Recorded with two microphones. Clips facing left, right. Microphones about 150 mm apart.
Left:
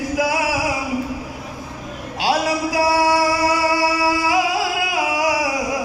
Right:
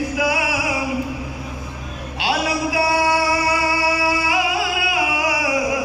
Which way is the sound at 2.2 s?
40° left (ahead or behind).